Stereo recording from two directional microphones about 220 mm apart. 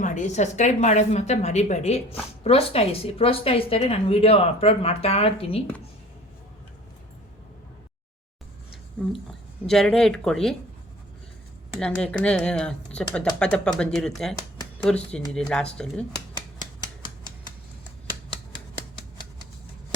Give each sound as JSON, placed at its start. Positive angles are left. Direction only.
{"t": 0.0, "sound": "a woman's voice", "side_deg": 35}
{"t": 9.6, "sound": "speech", "side_deg": 0}
{"t": 11.8, "sound": "speech", "side_deg": 5}